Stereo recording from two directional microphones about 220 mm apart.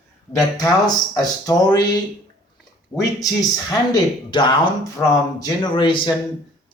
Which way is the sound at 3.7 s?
20° left (ahead or behind).